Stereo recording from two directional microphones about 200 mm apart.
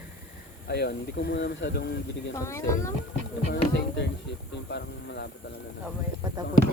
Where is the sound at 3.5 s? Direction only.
55° left (ahead or behind).